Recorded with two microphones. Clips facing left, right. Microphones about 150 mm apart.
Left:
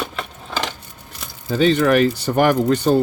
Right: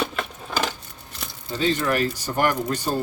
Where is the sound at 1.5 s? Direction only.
75° left (ahead or behind).